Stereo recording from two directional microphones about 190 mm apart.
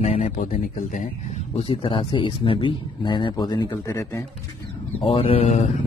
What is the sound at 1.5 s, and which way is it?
Speech, 30° left (ahead or behind).